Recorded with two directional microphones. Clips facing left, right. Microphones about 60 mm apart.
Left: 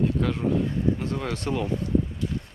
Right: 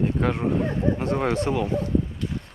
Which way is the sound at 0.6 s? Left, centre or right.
Right.